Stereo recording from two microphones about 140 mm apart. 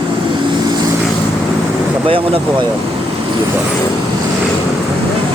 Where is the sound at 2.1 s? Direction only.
40° right (ahead or behind).